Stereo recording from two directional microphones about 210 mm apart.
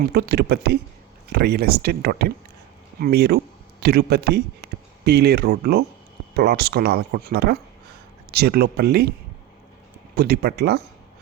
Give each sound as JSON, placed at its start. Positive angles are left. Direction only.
{"t": 0.0, "sound": "speech", "side_deg": -50}
{"t": 10.2, "sound": "speech", "side_deg": -50}